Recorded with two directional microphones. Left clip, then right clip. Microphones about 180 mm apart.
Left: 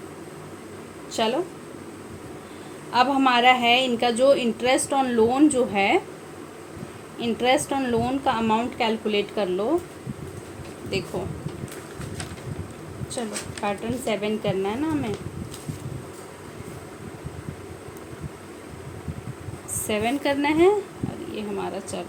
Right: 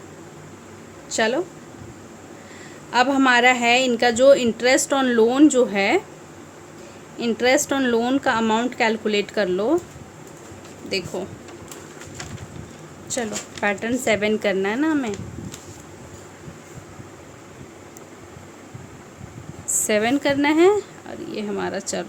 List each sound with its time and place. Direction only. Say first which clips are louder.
1.1 s a woman's voice: right 3 dB; 30° right (ahead or behind)
2.9 s a woman's voice: right 2 dB; 30° right (ahead or behind)
7.2 s a woman's voice: right 3 dB; 30° right (ahead or behind)
13.7 s speech: right 6 dB; 45° right (ahead or behind)
19.9 s a woman's voice: right 4 dB; 35° right (ahead or behind)